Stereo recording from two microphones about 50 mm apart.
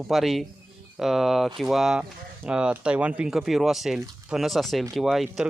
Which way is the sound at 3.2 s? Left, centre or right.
Centre.